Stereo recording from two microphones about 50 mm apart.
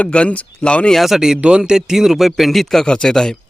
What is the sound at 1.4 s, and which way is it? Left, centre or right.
A man's voice, centre.